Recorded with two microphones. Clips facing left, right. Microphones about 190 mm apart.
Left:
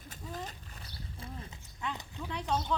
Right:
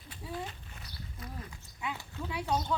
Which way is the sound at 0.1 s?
40° left (ahead or behind).